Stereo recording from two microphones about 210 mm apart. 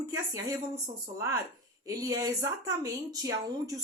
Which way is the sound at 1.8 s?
15° right (ahead or behind).